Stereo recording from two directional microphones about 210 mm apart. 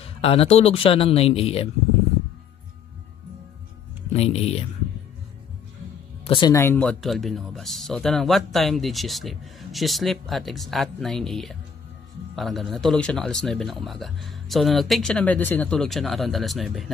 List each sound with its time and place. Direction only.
0.2 s speech: 25° left (ahead or behind)
4.1 s speech: 30° left (ahead or behind)
6.2 s speech: 20° left (ahead or behind); by 16.9 s centre (ahead or behind)